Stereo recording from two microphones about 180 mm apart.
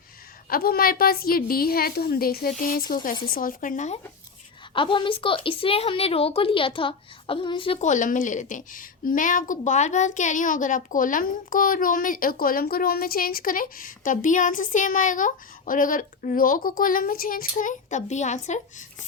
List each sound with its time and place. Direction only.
0.5 s a woman's voice: 55° left (ahead or behind)
4.7 s a woman's voice: 30° left (ahead or behind)